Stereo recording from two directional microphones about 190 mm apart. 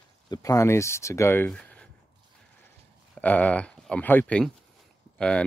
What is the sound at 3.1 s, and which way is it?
Speech, 10° left (ahead or behind).